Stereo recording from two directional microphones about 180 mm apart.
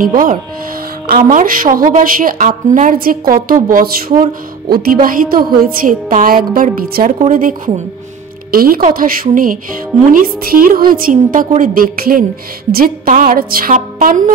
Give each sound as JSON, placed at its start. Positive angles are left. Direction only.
{"t": 1.0, "sound": "a woman's voice", "side_deg": -50}